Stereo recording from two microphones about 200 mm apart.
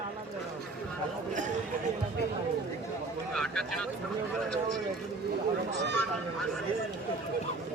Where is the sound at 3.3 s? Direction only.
5° left (ahead or behind).